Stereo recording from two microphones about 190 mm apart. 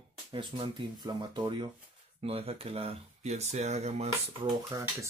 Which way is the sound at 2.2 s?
30° right (ahead or behind).